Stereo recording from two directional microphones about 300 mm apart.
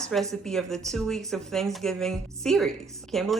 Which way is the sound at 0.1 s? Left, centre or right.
Centre.